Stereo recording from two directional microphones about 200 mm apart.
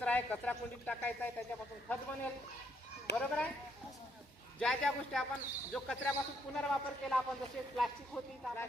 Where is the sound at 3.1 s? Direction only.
60° left (ahead or behind).